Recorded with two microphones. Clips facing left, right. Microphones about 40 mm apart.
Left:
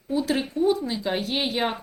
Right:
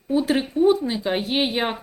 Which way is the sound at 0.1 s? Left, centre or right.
Right.